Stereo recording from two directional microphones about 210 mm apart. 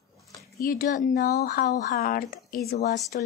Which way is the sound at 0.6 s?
45° left (ahead or behind).